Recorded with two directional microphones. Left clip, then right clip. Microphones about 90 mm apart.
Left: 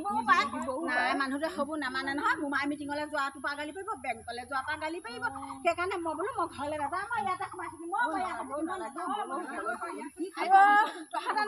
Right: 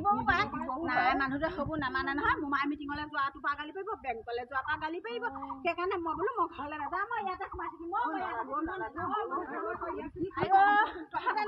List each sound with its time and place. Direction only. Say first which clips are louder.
0.0 s a woman's voice: left 2 dB; 30° left (ahead or behind); by 7.1 s 45° left (ahead or behind)
8.1 s a woman's voice: left 1 dB; 50° left (ahead or behind)
10.4 s speech: left 3 dB; 40° left (ahead or behind)